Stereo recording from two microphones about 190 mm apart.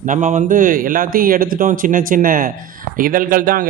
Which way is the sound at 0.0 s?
40° right (ahead or behind).